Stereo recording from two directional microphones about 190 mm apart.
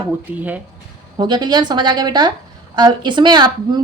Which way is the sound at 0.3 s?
10° right (ahead or behind).